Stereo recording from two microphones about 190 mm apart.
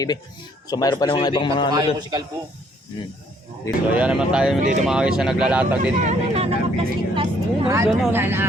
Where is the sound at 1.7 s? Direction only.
20° right (ahead or behind).